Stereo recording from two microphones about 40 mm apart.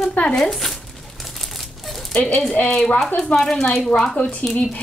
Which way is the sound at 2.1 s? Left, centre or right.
Left.